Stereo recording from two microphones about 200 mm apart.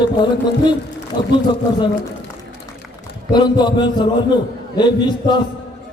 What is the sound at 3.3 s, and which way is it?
A man's voice, 20° left (ahead or behind).